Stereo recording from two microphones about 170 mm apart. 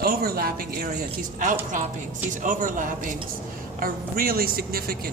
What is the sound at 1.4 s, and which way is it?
Speech, 50° right (ahead or behind).